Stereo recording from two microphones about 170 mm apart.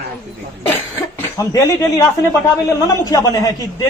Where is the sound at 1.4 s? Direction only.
20° left (ahead or behind).